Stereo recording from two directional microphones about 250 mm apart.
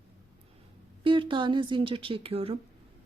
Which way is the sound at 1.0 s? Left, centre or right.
Centre.